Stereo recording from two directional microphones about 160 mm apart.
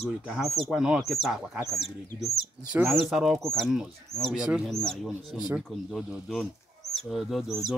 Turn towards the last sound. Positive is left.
turn(degrees=0)  # may be behind; listen again after turning